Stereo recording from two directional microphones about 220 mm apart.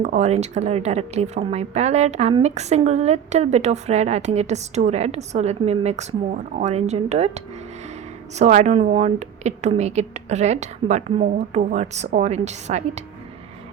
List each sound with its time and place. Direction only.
0.0 s speech: 30° right (ahead or behind)
8.4 s speech: 30° right (ahead or behind)